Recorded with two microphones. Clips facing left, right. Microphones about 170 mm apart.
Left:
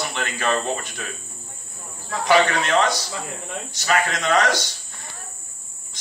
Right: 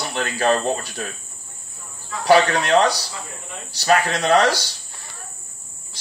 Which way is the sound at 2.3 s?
35° right (ahead or behind).